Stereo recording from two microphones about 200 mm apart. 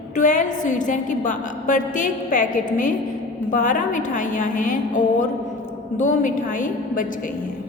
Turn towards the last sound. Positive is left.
turn(degrees=40)  # may be behind; listen again after turning